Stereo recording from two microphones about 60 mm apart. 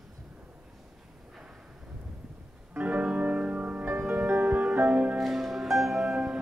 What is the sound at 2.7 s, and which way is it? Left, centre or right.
Music, right.